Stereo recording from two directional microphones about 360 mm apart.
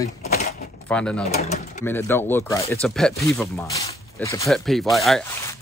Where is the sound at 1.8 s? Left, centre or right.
Centre.